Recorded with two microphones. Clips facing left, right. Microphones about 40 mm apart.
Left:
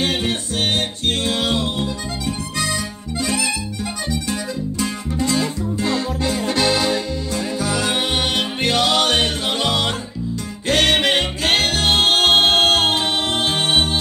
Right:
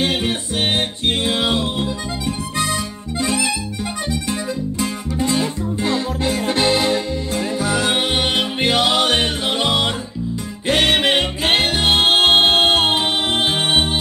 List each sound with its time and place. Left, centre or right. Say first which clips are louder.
0.0 s music: right 1 dB; centre